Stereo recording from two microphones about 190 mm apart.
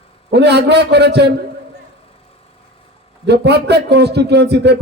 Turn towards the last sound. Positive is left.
turn(degrees=-60)  # may be behind; listen again after turning